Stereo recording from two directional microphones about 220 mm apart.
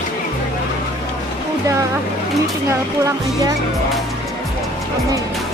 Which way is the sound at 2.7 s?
10° right (ahead or behind).